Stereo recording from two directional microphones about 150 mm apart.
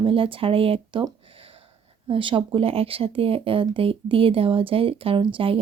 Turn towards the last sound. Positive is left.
turn(degrees=-35)  # may be behind; listen again after turning